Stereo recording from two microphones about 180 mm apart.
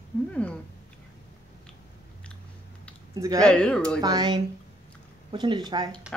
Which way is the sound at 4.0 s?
20° right (ahead or behind).